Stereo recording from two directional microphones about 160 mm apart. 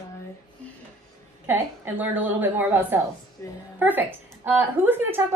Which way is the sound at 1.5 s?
10° right (ahead or behind).